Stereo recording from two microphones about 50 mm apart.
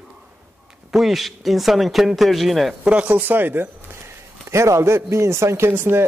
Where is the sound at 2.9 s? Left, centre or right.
Right.